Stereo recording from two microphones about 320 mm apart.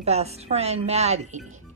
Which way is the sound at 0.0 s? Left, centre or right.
Centre.